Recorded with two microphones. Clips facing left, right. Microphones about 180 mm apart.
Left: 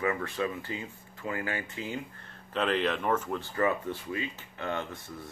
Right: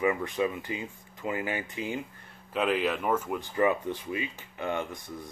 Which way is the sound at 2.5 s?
5° right (ahead or behind).